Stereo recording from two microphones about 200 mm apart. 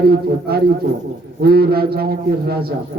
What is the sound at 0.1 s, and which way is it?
A man's voice, 50° right (ahead or behind).